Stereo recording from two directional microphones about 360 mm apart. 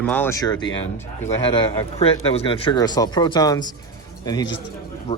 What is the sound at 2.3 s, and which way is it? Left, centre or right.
Speech, centre.